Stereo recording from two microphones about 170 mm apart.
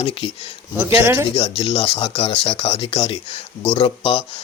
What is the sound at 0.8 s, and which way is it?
Speech, 15° right (ahead or behind).